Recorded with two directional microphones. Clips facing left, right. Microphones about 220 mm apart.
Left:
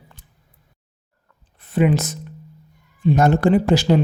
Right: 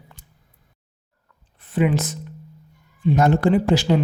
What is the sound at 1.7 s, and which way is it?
Speech, 45° left (ahead or behind).